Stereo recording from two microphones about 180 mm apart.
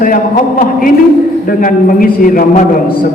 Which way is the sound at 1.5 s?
50° left (ahead or behind).